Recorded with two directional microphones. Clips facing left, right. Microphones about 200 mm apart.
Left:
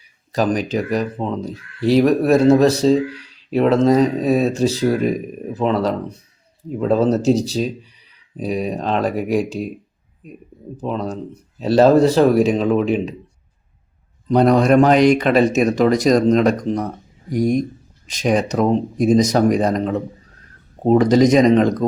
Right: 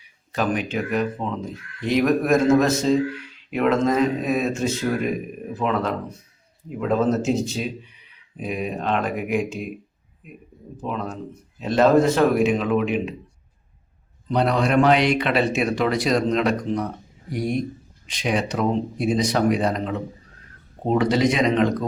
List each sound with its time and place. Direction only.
0.3 s speech: 40° left (ahead or behind)
14.3 s speech: 45° left (ahead or behind)